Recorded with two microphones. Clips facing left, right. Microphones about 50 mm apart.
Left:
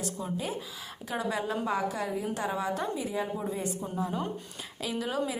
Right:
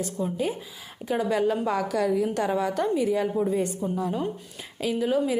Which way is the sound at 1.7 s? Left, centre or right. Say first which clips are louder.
Right 6 dB; right.